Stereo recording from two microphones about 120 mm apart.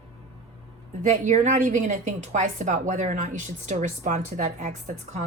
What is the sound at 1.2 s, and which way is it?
A woman's voice, 90° right.